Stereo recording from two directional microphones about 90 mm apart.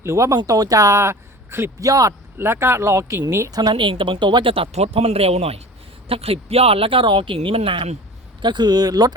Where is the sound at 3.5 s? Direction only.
45° right (ahead or behind).